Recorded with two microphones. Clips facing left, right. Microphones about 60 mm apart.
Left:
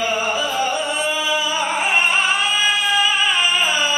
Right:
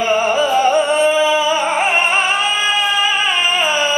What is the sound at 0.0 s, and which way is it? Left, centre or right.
Music, right.